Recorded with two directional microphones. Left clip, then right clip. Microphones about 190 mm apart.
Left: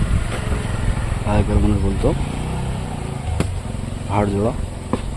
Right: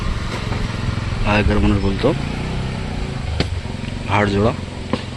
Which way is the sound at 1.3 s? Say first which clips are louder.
Right 4 dB; 5° left (ahead or behind).